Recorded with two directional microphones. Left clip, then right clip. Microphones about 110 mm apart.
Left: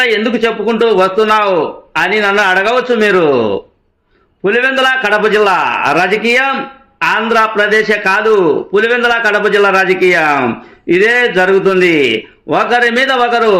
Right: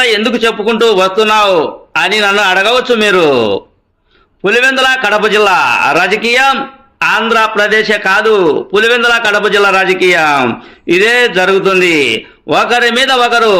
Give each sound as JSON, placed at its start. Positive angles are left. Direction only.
{"t": 0.0, "sound": "a man's voice", "side_deg": -15}